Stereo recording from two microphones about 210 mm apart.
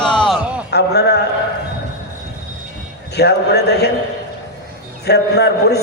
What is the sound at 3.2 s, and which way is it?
Speech, 50° left (ahead or behind).